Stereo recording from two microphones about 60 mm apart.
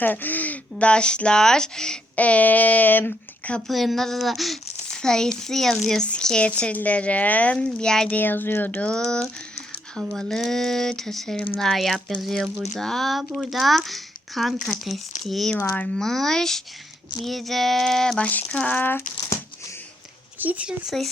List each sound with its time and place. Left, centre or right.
0.0 s speech: left; by 2.0 s centre
2.1 s speech: left
3.7 s speech: centre
8.1 s speech: left
9.0 s speech: centre
18.2 s speech: left
20.4 s speech: right
20.9 s speech: centre